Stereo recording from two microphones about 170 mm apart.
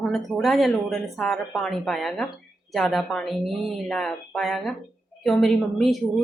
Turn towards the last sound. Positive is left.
turn(degrees=0)  # may be behind; listen again after turning